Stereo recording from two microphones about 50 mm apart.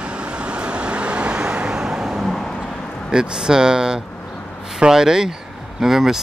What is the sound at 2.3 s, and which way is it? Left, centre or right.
Vehicle, centre.